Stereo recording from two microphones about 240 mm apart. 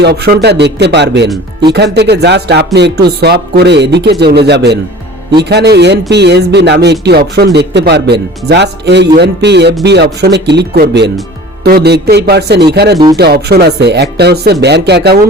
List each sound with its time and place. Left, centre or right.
0.0 s speech: right